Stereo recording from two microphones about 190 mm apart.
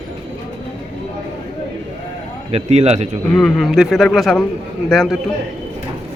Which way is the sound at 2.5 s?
35° right (ahead or behind).